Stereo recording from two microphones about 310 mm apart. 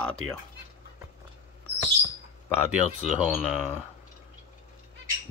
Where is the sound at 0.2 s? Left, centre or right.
Right.